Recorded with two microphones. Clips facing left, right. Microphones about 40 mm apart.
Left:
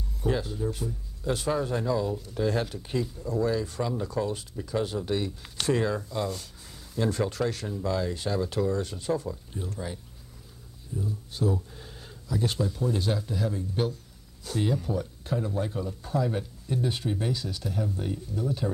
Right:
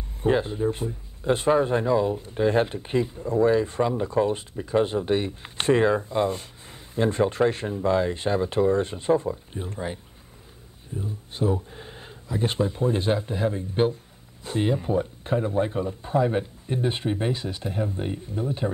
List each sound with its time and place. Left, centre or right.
0.2 s speech: right
11.0 s speech: right